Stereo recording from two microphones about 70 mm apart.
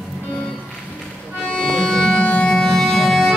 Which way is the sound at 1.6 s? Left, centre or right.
Centre.